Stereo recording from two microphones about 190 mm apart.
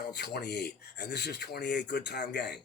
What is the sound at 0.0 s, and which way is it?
Speech, 60° left (ahead or behind).